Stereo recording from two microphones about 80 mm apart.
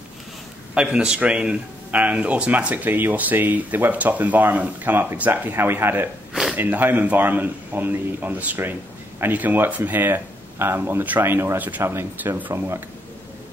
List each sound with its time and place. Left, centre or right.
0.7 s a man's voice: centre